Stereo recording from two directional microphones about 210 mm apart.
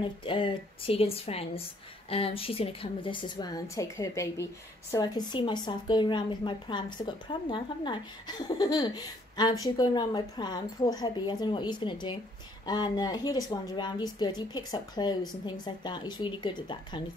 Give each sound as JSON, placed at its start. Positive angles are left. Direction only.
{"t": 0.0, "sound": "speech", "side_deg": 25}